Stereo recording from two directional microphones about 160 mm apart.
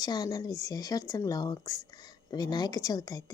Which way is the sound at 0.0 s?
25° left (ahead or behind).